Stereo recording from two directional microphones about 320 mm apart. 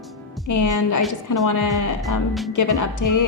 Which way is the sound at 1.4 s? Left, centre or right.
Left.